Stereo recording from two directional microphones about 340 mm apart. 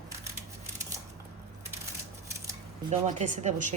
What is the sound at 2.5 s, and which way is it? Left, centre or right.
Speech, centre.